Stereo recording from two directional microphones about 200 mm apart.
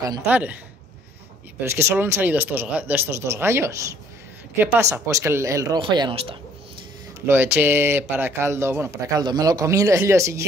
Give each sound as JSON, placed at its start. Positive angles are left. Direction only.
{"t": 0.3, "sound": "speech", "side_deg": -5}
{"t": 1.6, "sound": "speech", "side_deg": -15}
{"t": 7.2, "sound": "speech", "side_deg": -10}